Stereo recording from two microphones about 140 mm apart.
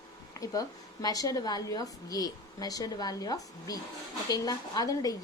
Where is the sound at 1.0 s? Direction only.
25° left (ahead or behind).